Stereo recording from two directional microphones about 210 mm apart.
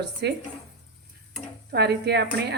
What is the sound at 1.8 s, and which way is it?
Speech, 50° right (ahead or behind).